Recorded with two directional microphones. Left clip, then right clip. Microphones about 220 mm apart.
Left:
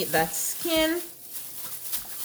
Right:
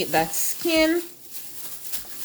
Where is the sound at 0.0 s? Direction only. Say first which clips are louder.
Right 2 dB; 20° right (ahead or behind).